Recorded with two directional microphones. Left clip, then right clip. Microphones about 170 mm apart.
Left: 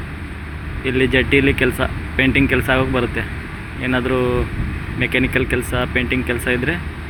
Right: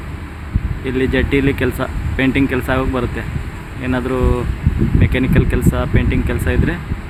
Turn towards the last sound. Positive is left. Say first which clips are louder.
# left 1 dB
turn(degrees=-15)  # may be behind; listen again after turning